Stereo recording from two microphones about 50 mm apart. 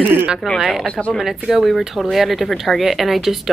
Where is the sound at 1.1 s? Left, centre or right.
Centre.